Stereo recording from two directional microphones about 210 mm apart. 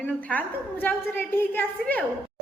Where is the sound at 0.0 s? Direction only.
5° left (ahead or behind).